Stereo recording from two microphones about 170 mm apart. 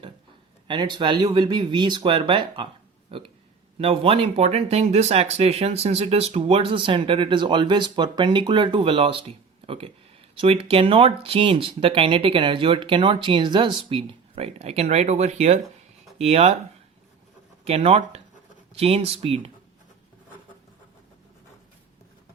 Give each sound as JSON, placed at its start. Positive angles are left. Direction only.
{"t": 0.7, "sound": "speech", "side_deg": -25}
{"t": 17.7, "sound": "speech", "side_deg": -35}